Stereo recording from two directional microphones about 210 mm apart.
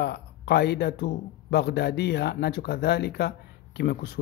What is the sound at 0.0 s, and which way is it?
Speech, 50° left (ahead or behind).